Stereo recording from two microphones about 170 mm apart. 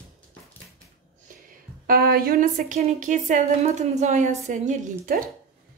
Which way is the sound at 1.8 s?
60° right (ahead or behind).